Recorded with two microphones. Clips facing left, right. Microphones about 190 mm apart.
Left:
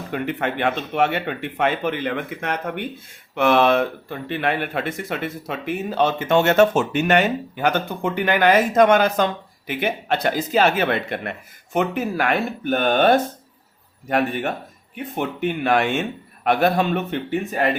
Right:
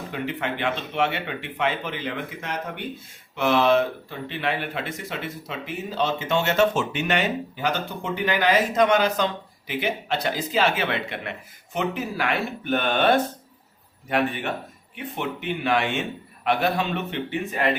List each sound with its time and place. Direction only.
0.1 s speech: 55° left (ahead or behind)